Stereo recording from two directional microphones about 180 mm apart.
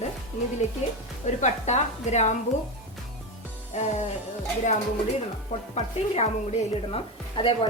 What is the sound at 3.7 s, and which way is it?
Speech, 40° left (ahead or behind).